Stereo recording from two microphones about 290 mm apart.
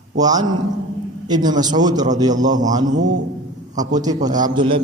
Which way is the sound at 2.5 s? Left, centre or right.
Right.